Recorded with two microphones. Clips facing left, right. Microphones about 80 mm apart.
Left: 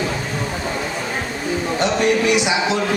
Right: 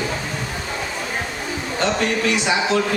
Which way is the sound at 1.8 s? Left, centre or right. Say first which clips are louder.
Left 2 dB; centre.